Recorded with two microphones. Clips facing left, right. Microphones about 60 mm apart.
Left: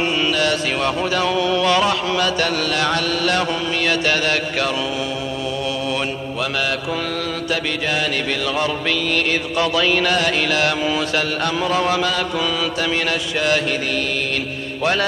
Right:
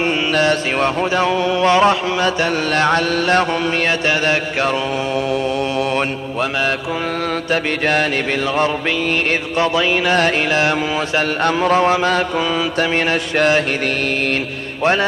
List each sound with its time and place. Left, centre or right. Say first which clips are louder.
0.0 s mantra: right 3 dB; right
7.8 s mantra: right 5 dB; right
9.8 s mantra: left 1 dB; right
10.1 s mantra: right 3 dB; right
14.8 s a man's voice: right 4 dB; right